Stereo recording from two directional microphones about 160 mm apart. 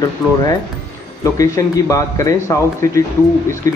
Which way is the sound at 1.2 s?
20° left (ahead or behind).